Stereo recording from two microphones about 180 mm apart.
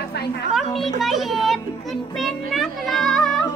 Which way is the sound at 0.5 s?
Centre (ahead or behind).